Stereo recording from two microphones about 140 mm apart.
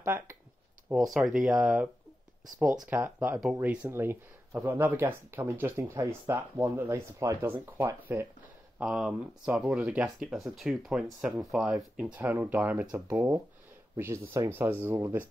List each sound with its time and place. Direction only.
0.0 s speech: 15° right (ahead or behind)
0.8 s speech: centre (ahead or behind)
8.7 s speech: 5° right (ahead or behind)